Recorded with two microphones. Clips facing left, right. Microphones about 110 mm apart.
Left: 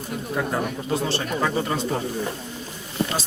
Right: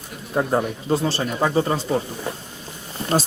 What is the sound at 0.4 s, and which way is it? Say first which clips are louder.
Speech: right 5 dB; 35° right (ahead or behind).